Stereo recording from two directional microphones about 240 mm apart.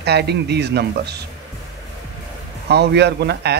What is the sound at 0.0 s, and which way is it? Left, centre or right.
Speech, right.